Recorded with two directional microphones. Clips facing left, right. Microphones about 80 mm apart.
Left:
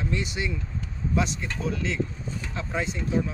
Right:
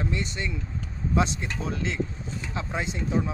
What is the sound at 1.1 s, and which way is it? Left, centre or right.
Speech, right.